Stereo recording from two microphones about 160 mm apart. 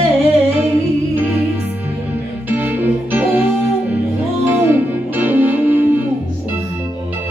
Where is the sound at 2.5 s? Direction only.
10° right (ahead or behind).